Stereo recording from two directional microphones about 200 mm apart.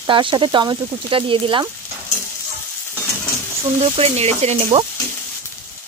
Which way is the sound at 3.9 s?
30° right (ahead or behind).